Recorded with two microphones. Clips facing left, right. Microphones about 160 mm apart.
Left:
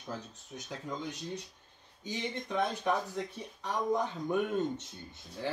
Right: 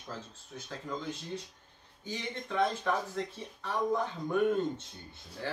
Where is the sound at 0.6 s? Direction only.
15° left (ahead or behind).